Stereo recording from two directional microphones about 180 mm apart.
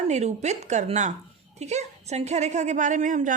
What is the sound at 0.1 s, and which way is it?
A woman's voice, 40° right (ahead or behind).